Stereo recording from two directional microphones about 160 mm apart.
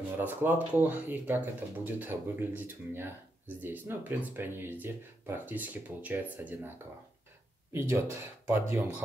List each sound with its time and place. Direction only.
0.2 s speech: 10° right (ahead or behind)
7.9 s speech: 15° right (ahead or behind)